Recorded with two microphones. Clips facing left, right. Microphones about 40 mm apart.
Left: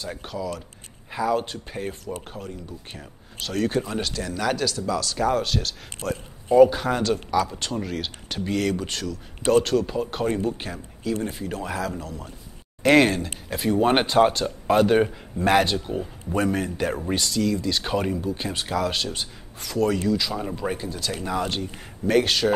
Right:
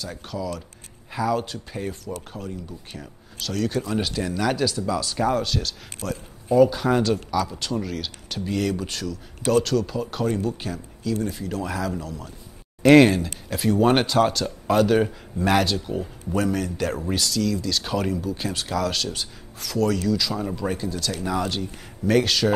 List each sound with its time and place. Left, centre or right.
0.0 s speech: left
4.3 s speech: centre
5.4 s speech: centre
6.0 s speech: left
6.6 s speech: left
6.9 s speech: centre
7.2 s speech: left
9.5 s speech: left
12.8 s speech: centre
15.9 s speech: centre